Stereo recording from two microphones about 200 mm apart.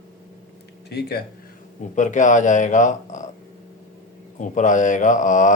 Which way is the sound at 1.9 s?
40° left (ahead or behind).